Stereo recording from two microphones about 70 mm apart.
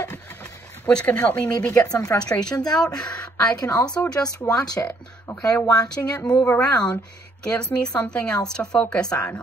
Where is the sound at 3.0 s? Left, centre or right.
Centre.